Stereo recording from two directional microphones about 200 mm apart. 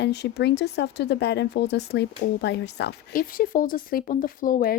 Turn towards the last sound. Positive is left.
turn(degrees=45)  # may be behind; listen again after turning